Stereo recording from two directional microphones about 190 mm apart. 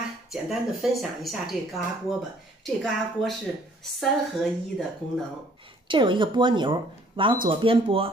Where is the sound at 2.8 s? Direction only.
Centre (ahead or behind).